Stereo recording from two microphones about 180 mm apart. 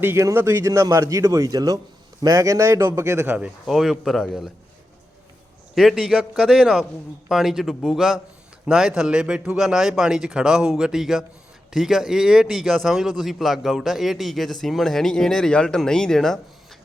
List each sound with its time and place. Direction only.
0.0 s speech: 15° right (ahead or behind)
5.7 s a man's voice: centre (ahead or behind)